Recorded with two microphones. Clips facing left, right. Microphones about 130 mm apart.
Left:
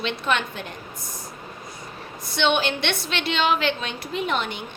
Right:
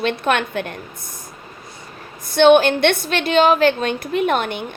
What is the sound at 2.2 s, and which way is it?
A woman's voice, 50° right (ahead or behind).